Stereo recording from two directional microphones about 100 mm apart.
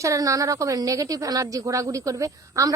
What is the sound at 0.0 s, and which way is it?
A woman's voice, 35° right (ahead or behind).